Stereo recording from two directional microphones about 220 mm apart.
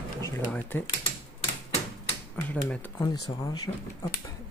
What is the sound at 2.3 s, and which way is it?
Speech, 5° left (ahead or behind).